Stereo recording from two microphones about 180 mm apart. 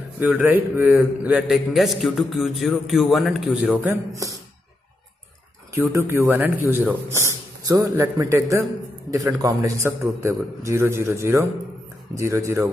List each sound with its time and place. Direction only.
0.3 s a man's voice: 10° right (ahead or behind)
5.9 s a man's voice: 15° right (ahead or behind)